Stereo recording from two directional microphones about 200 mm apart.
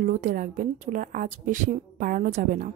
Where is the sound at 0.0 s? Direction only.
45° right (ahead or behind).